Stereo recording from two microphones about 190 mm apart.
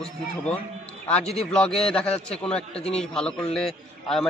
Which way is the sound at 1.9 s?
5° left (ahead or behind).